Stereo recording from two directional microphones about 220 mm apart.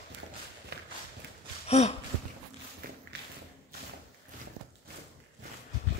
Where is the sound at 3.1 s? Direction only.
50° right (ahead or behind).